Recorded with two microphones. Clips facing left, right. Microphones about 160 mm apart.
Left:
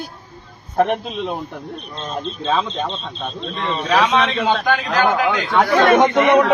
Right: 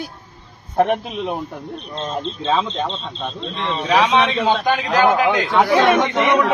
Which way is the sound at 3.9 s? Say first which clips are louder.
Right 1 dB; 10° right (ahead or behind).